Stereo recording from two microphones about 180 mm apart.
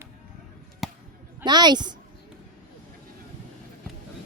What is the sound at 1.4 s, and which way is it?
Speech, 25° right (ahead or behind).